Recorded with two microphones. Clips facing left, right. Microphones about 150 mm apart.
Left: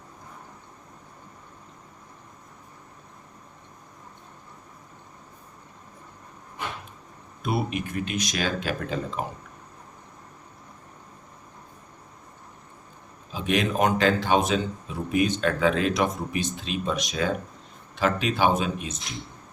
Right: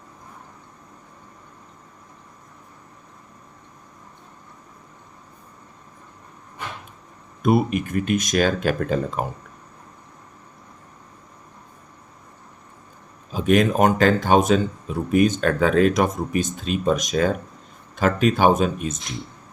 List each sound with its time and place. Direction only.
7.4 s speech: 50° right (ahead or behind)
13.3 s speech: 45° right (ahead or behind)